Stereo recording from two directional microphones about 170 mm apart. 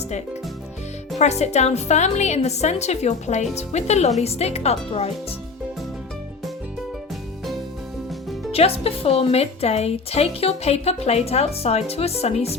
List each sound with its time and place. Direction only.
1.2 s a woman's voice: 40° left (ahead or behind)
8.5 s a woman's voice: 35° left (ahead or behind)